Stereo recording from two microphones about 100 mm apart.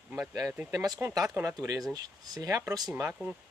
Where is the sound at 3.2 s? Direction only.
15° right (ahead or behind).